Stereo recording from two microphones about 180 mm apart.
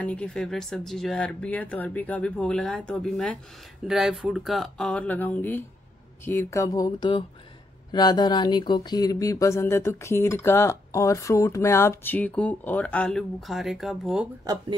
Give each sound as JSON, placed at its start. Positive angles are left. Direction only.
{"t": 0.0, "sound": "speech", "side_deg": 5}
{"t": 14.4, "sound": "speech", "side_deg": -20}